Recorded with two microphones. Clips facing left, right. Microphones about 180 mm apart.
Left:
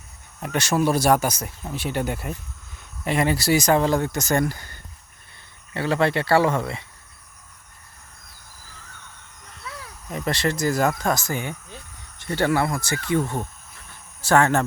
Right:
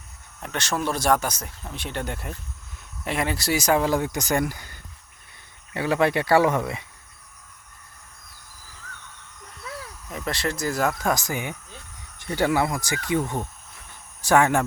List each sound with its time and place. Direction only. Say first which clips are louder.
0.4 s speech: left 5 dB; 10° left (ahead or behind); by 4.7 s 10° right (ahead or behind)
5.7 s speech: even; 15° right (ahead or behind)
10.1 s speech: left 4 dB; centre (ahead or behind)
11.1 s speech: left 1 dB; 15° right (ahead or behind)